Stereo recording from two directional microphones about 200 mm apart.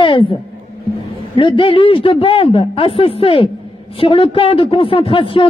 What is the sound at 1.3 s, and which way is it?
A man's voice, 25° left (ahead or behind).